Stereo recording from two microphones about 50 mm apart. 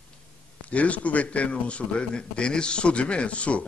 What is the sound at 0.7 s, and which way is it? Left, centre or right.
A man's voice, left.